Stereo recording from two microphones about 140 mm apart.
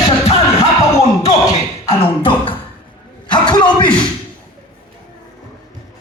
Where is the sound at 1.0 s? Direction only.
50° left (ahead or behind).